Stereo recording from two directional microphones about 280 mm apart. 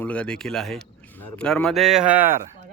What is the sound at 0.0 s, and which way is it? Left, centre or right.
Speech, centre.